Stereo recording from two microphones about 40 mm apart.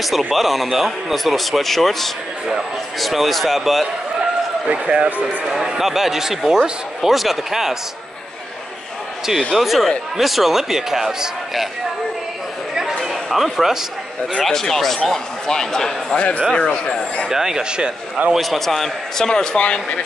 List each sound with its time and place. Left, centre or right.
0.3 s a man's voice: centre
4.6 s speech: right
5.5 s speech: centre
7.0 s a man's voice: centre
9.6 s a man's voice: centre
13.1 s speech: centre
14.4 s speech: centre
16.5 s speech: left
17.3 s speech: centre
18.3 s a man's voice: centre
18.7 s speech: centre